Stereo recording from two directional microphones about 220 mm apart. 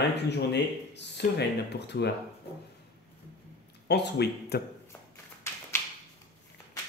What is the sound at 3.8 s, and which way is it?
Speech, 50° left (ahead or behind).